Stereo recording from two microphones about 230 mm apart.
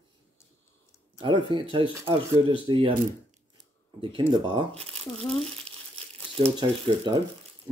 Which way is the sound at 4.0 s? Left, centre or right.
Right.